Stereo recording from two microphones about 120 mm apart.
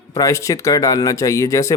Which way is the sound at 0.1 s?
25° left (ahead or behind).